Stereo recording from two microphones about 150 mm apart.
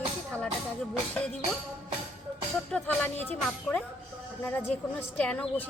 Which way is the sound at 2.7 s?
5° left (ahead or behind).